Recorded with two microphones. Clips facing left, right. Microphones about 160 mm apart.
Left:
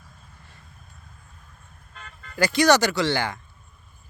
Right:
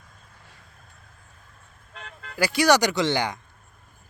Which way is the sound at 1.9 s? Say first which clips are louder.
Right 4 dB; 80° right.